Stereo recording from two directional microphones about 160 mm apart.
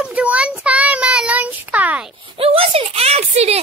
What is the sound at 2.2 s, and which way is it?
Speech, 35° right (ahead or behind).